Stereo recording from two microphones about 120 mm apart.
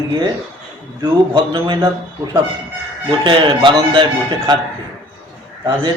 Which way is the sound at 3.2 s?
45° right (ahead or behind).